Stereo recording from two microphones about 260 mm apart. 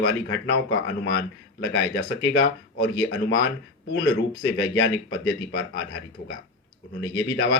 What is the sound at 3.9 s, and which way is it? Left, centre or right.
Speech, left.